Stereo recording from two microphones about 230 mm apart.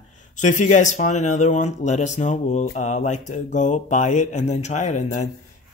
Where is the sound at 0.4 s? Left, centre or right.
Left.